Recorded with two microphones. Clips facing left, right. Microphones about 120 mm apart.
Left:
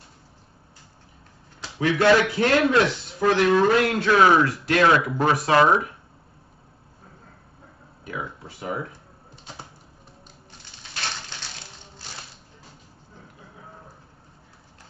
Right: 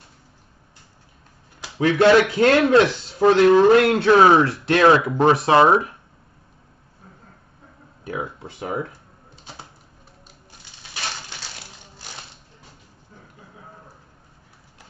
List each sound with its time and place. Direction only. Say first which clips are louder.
2.0 s a man's voice: right 4 dB; 25° right (ahead or behind)
8.1 s speech: right 4 dB; 25° right (ahead or behind)